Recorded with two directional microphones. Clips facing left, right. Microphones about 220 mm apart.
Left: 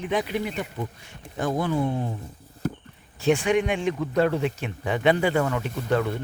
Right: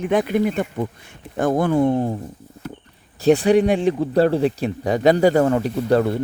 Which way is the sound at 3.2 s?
35° right (ahead or behind).